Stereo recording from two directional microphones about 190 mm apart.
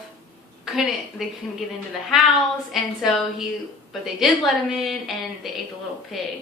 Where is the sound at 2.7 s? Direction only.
Centre (ahead or behind).